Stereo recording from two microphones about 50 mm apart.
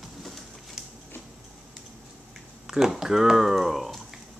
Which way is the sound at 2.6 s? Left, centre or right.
Centre.